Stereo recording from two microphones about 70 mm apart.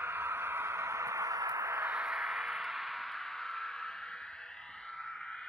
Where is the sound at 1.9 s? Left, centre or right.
Centre.